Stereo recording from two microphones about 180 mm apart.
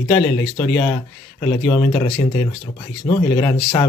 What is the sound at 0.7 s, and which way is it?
Speech, 10° left (ahead or behind).